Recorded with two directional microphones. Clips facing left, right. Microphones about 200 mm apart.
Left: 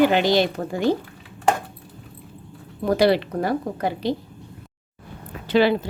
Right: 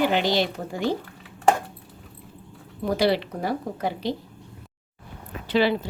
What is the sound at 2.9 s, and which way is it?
A woman's voice, 50° left (ahead or behind).